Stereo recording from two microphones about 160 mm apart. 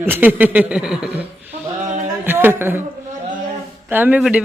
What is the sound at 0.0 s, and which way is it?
A man's voice, 10° right (ahead or behind).